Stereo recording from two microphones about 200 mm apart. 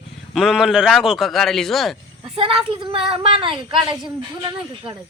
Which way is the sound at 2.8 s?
25° right (ahead or behind).